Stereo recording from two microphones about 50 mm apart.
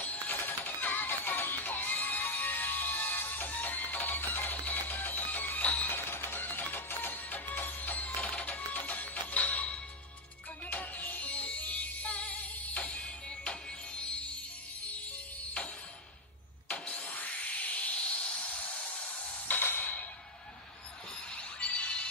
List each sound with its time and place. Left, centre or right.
0.0 s music: left
5.9 s music: left; by 13.6 s centre
16.6 s a sound: left
19.6 s music: left
21.4 s music: left